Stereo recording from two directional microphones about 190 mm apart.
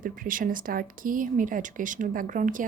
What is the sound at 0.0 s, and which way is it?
Speech, 45° right (ahead or behind).